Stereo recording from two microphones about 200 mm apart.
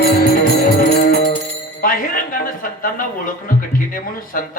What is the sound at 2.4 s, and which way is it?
Speech, 45° left (ahead or behind).